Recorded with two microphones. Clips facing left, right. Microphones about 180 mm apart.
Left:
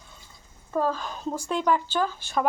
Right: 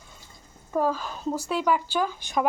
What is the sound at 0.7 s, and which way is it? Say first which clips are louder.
Speech: right 1 dB; 10° right (ahead or behind).